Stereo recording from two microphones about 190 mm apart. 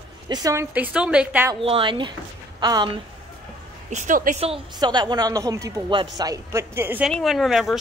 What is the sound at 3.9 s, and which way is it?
Speech, 45° right (ahead or behind).